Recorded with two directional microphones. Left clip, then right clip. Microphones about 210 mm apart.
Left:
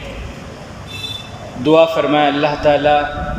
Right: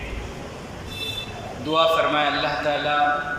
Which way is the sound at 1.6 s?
35° left (ahead or behind).